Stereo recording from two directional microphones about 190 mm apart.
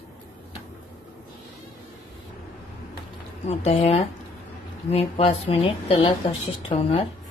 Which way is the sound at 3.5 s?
35° left (ahead or behind).